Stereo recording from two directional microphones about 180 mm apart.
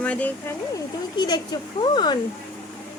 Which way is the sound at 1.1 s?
20° left (ahead or behind).